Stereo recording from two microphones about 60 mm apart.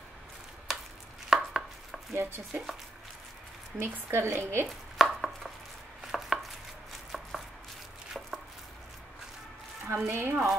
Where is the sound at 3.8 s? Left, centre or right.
Right.